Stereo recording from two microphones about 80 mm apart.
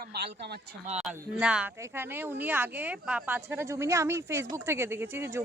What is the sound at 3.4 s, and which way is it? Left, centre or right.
Speech, right.